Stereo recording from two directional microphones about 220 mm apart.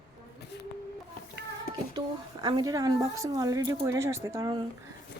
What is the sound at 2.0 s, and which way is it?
A woman's voice, 20° right (ahead or behind).